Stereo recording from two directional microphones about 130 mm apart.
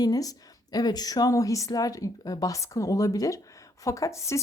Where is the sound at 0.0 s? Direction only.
30° left (ahead or behind).